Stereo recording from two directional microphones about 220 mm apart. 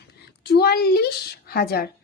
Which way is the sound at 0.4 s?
45° left (ahead or behind).